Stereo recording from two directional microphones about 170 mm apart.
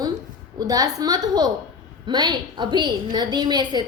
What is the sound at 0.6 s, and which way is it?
A woman's voice, 20° right (ahead or behind).